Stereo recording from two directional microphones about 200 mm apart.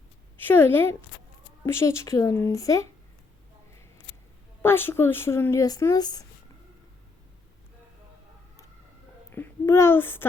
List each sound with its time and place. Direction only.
0.3 s a woman's voice: 10° left (ahead or behind)
4.6 s speech: 10° left (ahead or behind)
9.3 s a child's voice: 10° left (ahead or behind)